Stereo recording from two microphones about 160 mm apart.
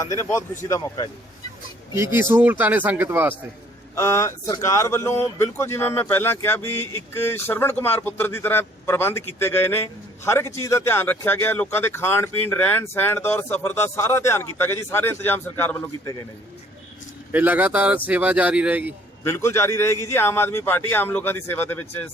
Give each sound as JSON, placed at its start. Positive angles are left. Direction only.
{"t": 0.2, "sound": "speech", "side_deg": 20}
{"t": 2.0, "sound": "speech", "side_deg": -15}
{"t": 3.9, "sound": "speech", "side_deg": 20}
{"t": 17.3, "sound": "speech", "side_deg": -10}
{"t": 19.2, "sound": "speech", "side_deg": 15}